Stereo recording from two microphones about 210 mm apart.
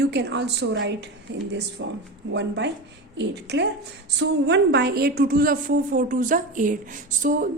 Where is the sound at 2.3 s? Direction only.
55° right (ahead or behind).